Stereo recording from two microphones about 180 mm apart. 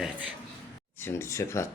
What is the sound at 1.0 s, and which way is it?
Speech, 15° left (ahead or behind).